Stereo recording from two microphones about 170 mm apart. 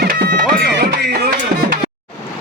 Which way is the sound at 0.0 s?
60° right (ahead or behind).